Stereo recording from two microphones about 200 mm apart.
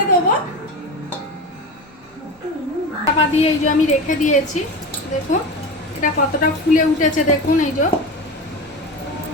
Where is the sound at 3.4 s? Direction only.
40° left (ahead or behind).